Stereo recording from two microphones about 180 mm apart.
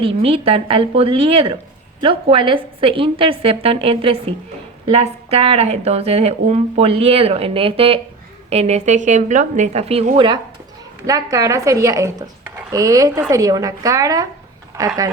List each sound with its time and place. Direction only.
0.0 s a woman's voice: 30° right (ahead or behind)